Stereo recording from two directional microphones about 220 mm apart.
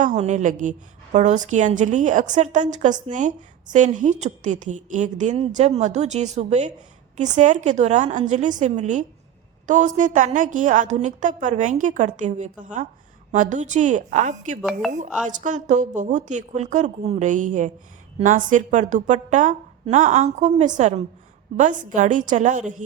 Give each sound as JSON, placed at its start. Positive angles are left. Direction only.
{"t": 0.0, "sound": "a woman's voice", "side_deg": -30}
{"t": 14.6, "sound": "speech", "side_deg": 0}
{"t": 15.3, "sound": "a woman's voice", "side_deg": -35}